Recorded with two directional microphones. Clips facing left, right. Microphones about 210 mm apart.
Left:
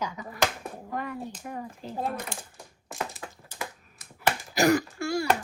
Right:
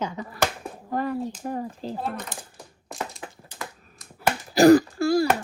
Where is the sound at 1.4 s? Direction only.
35° right (ahead or behind).